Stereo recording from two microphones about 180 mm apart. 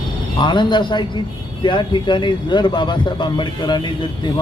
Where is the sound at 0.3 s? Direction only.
25° left (ahead or behind).